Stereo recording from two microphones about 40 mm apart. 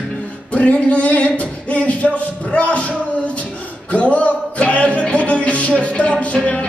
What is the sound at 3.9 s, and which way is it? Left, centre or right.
Music, left.